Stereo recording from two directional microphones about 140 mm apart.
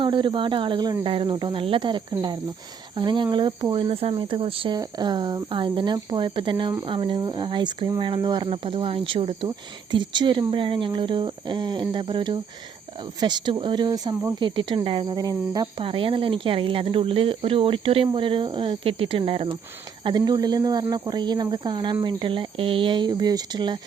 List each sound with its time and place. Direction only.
0.0 s speech: 35° right (ahead or behind)
15.8 s speech: 40° right (ahead or behind)
20.1 s speech: 30° right (ahead or behind)